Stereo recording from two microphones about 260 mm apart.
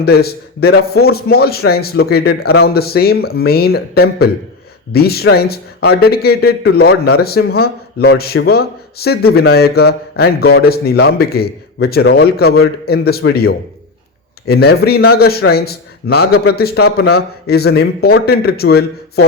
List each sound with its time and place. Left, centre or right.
0.0 s a man's voice: left